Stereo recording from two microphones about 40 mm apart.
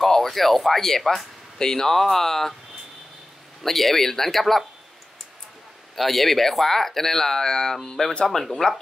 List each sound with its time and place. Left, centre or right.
0.0 s speech: centre
3.6 s speech: centre
5.9 s speech: centre; by 8.3 s left
8.3 s speech: centre